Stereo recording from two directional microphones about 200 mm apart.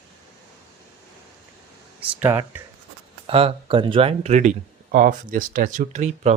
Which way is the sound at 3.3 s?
30° right (ahead or behind).